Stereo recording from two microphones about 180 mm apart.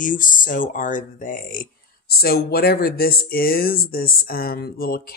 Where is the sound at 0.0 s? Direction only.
45° left (ahead or behind).